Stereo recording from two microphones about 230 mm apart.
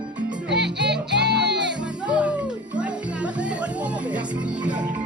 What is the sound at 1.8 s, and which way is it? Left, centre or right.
Music, centre.